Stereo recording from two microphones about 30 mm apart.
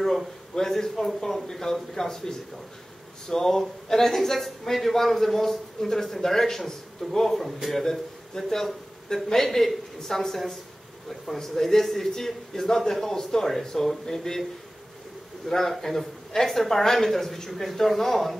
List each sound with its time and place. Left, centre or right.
0.6 s a man's voice: centre
15.4 s a man's voice: centre